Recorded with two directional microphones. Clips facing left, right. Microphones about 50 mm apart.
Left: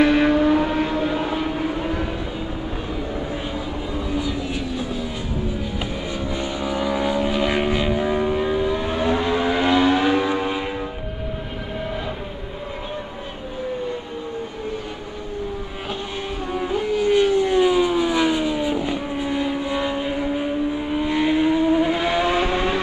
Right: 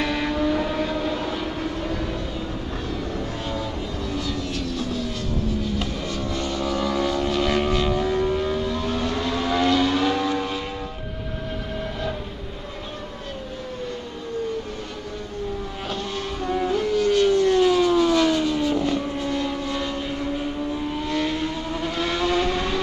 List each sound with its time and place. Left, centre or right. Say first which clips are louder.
0.0 s vehicle: left 9 dB; left
5.5 s vehicle: right 1 dB; centre
16.6 s vehicle: left 1 dB; centre